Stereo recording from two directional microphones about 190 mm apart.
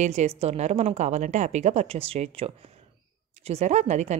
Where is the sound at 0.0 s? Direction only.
35° right (ahead or behind).